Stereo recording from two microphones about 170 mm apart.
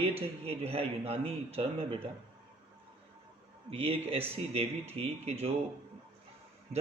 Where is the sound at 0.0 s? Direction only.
35° right (ahead or behind).